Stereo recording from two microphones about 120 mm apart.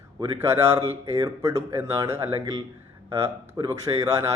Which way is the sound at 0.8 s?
30° right (ahead or behind).